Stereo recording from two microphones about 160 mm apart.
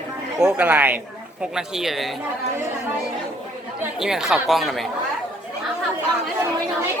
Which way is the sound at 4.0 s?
5° right (ahead or behind).